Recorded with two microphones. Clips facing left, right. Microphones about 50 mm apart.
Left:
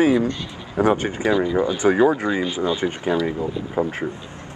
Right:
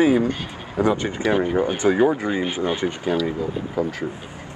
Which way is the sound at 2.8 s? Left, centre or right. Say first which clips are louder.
Left 1 dB; left.